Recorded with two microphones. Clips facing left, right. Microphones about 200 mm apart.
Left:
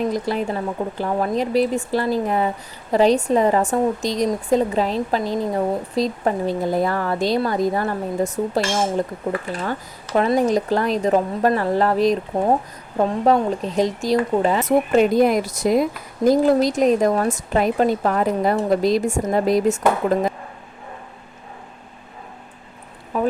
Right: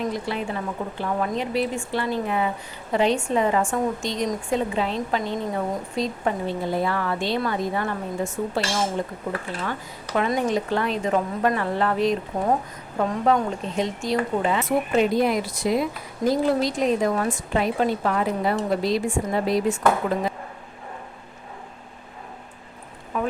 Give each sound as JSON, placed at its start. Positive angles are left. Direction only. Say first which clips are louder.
{"t": 0.1, "sound": "a woman's voice", "louder": "left 5 dB", "side_deg": 40}
{"t": 10.2, "sound": "a woman's voice", "louder": "left 5 dB", "side_deg": 35}
{"t": 23.1, "sound": "a sound", "louder": "left 5 dB", "side_deg": 35}